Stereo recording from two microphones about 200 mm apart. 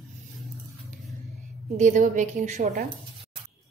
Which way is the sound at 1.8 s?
35° right (ahead or behind).